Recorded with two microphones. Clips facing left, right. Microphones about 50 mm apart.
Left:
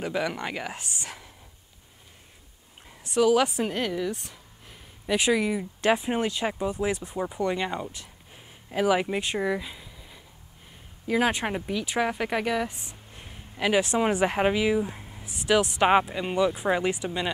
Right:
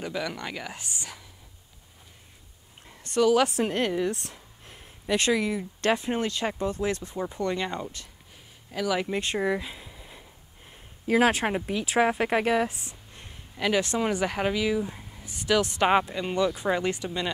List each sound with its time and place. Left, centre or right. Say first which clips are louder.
0.0 s speech: left 3 dB; left
3.1 s speech: even; centre
3.6 s a woman's voice: right 2 dB; centre
4.1 s speech: right 1 dB; centre; by 9.0 s left
9.0 s speech: even; centre
9.4 s a sound: right 1 dB; centre
11.1 s speech: right 3 dB; centre
12.6 s a sound: right 2 dB; centre
13.6 s speech: left 2 dB; centre